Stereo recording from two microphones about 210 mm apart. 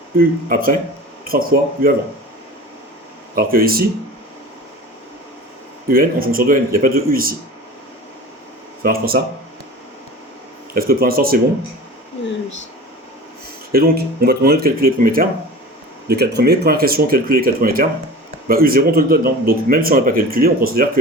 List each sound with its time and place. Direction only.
0.4 s speech: 45° right (ahead or behind)
3.3 s speech: 45° right (ahead or behind)
5.9 s speech: 45° right (ahead or behind)
8.8 s speech: 45° right (ahead or behind)
10.8 s speech: 45° right (ahead or behind)
13.7 s speech: 45° right (ahead or behind)